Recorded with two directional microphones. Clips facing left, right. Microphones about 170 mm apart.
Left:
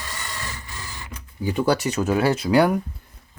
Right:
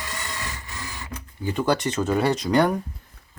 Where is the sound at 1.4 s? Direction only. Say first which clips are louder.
Left 2 dB; 10° left (ahead or behind).